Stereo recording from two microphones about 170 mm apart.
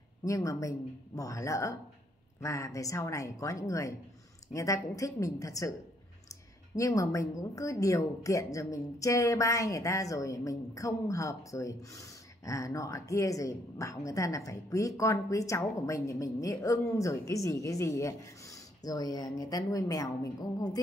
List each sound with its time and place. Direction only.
0.2 s a woman's voice: 20° left (ahead or behind)